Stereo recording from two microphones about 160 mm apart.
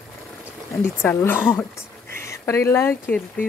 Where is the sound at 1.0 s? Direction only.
10° left (ahead or behind).